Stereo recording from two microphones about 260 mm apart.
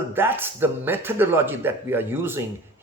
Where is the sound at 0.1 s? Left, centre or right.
Centre.